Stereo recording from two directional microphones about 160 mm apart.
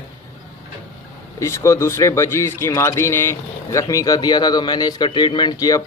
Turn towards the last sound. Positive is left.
turn(degrees=25)  # may be behind; listen again after turning